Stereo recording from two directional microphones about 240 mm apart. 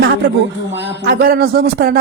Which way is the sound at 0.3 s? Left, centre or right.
Right.